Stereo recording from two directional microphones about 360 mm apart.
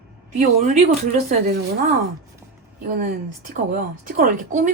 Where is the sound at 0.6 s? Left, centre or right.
Centre.